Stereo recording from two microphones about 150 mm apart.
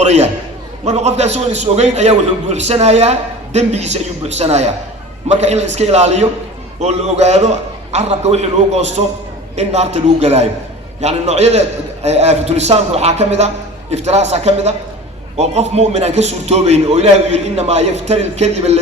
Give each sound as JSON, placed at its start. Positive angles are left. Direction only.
{"t": 0.0, "sound": "a man's voice", "side_deg": -50}